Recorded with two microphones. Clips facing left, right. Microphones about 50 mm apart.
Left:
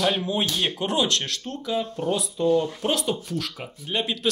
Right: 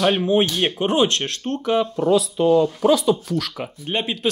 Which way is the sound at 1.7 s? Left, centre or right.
Right.